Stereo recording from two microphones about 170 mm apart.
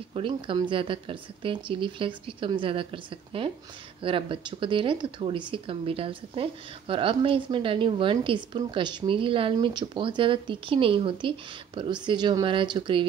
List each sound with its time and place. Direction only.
0.1 s speech: 30° right (ahead or behind)